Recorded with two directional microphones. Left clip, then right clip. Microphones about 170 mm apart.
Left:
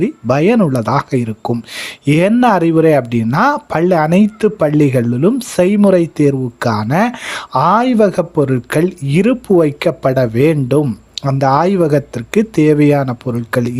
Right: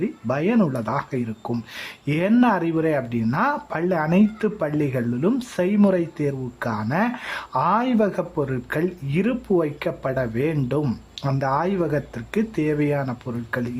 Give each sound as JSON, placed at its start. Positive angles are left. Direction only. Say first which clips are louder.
{"t": 0.0, "sound": "speech", "louder": "left 11 dB", "side_deg": 40}